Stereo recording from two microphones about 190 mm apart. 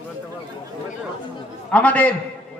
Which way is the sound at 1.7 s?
5° left (ahead or behind).